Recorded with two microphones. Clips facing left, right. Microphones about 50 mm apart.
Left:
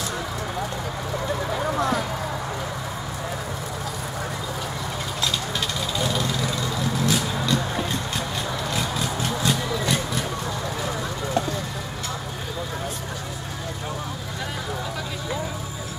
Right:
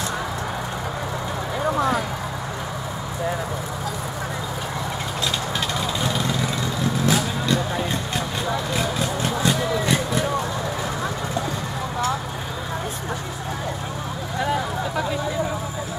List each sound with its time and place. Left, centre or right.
1.8 s a sound: centre
5.9 s vehicle: centre
14.4 s vehicle: centre